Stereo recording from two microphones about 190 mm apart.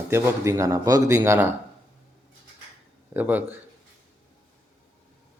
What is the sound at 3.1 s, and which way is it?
Speech, 10° right (ahead or behind).